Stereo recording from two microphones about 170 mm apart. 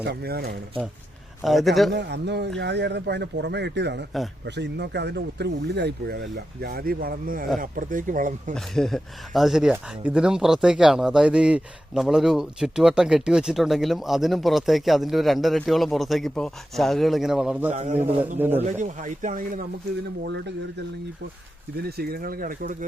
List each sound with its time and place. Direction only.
0.0 s speech: 75° right (ahead or behind)
1.4 s speech: centre (ahead or behind)
1.9 s speech: 80° right
2.6 s speech: 90° right; by 8.5 s 50° right (ahead or behind)
8.5 s speech: centre (ahead or behind)
17.7 s a man's voice: 40° right (ahead or behind)
18.3 s speech: 10° right (ahead or behind)
18.6 s speech: 45° right (ahead or behind)
21.8 s speech: 70° right (ahead or behind); by 22.9 s 50° right (ahead or behind)